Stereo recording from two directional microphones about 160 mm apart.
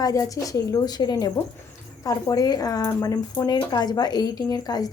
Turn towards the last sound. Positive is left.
turn(degrees=25)  # may be behind; listen again after turning